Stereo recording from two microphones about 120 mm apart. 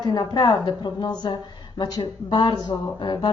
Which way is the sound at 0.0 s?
35° left (ahead or behind).